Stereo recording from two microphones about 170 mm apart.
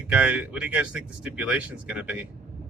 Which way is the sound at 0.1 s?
5° right (ahead or behind).